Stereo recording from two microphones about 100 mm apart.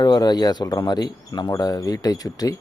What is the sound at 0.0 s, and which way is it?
Speech, 45° left (ahead or behind).